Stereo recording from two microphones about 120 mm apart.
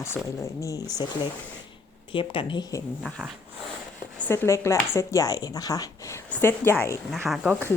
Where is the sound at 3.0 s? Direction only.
10° left (ahead or behind).